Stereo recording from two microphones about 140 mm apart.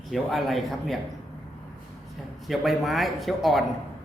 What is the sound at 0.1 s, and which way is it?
Speech, centre (ahead or behind).